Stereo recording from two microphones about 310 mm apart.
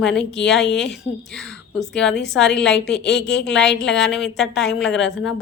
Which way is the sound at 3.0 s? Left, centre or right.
Left.